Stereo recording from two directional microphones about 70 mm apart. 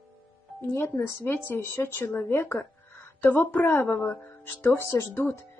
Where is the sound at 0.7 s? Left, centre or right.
Left.